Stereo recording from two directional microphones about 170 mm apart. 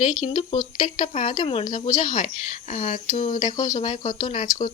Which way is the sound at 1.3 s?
30° left (ahead or behind).